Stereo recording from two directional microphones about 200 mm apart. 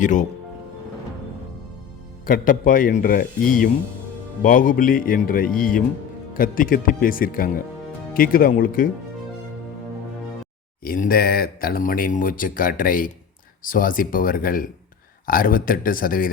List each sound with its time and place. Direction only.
0.0 s speech: 40° left (ahead or behind)
2.2 s speech: 45° left (ahead or behind)
4.4 s speech: 45° left (ahead or behind)
10.8 s speech: 45° left (ahead or behind)